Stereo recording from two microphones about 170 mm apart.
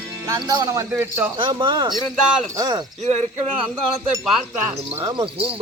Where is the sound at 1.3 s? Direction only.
30° right (ahead or behind).